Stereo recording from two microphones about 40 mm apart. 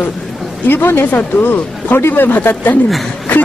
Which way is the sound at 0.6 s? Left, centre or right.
Left.